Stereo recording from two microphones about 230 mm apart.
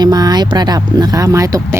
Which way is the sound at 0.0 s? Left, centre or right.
Centre.